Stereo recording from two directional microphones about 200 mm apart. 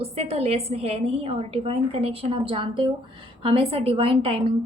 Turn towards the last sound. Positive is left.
turn(degrees=-30)  # may be behind; listen again after turning